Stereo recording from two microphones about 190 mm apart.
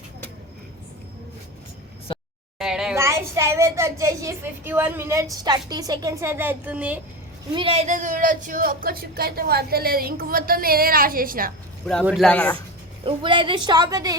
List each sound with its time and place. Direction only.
2.6 s a sound: centre (ahead or behind)
2.9 s a child's voice: 15° right (ahead or behind)
7.5 s speech: 30° right (ahead or behind); by 11.5 s 50° right (ahead or behind)
12.0 s speech: centre (ahead or behind)
13.1 s a woman's voice: 25° right (ahead or behind)